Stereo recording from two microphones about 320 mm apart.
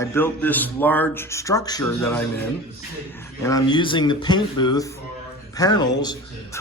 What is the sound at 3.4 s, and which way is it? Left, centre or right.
Speech, centre.